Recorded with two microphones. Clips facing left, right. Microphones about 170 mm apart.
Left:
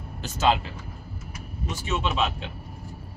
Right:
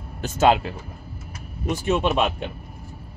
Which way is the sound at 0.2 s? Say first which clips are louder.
Right 5 dB; 55° right (ahead or behind).